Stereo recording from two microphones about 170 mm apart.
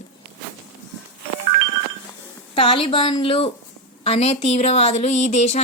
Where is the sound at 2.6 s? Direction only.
30° left (ahead or behind).